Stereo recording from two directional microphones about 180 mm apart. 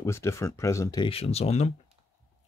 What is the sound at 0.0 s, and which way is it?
Speech, 15° left (ahead or behind).